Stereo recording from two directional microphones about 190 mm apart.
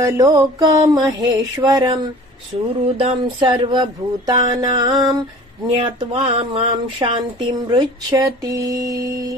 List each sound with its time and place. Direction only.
0.0 s speech: 20° right (ahead or behind)
3.0 s speech: 25° right (ahead or behind)